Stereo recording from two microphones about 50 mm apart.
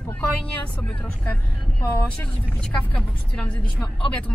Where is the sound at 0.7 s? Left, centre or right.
Left.